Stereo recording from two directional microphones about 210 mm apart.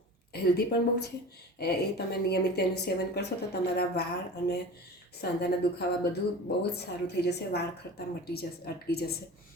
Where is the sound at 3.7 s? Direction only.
50° left (ahead or behind).